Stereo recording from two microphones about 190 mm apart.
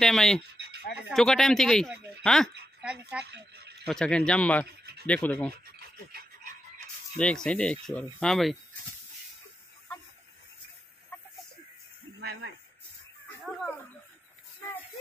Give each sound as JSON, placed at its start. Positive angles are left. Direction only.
{"t": 0.0, "sound": "speech", "side_deg": 5}
{"t": 3.3, "sound": "a sound", "side_deg": -60}
{"t": 3.8, "sound": "speech", "side_deg": 5}
{"t": 5.5, "sound": "rub", "side_deg": -55}
{"t": 7.2, "sound": "speech", "side_deg": 5}